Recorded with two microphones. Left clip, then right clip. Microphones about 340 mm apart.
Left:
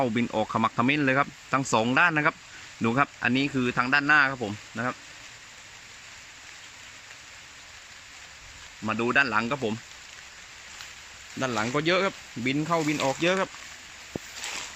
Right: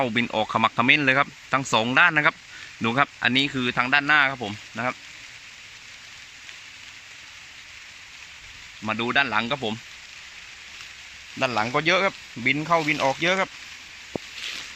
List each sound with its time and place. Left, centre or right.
0.0 s speech: centre
8.9 s speech: centre
11.3 s speech: centre
14.1 s a sound: right